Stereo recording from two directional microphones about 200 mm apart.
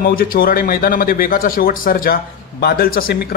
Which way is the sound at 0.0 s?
45° left (ahead or behind).